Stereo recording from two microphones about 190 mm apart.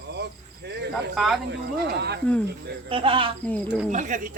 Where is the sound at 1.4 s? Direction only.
60° right (ahead or behind).